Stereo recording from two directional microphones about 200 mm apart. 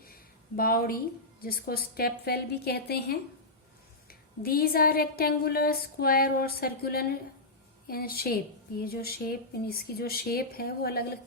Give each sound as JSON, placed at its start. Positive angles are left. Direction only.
{"t": 0.0, "sound": "a woman's voice", "side_deg": 45}